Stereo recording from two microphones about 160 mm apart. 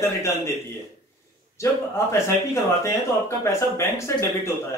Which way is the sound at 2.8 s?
20° left (ahead or behind).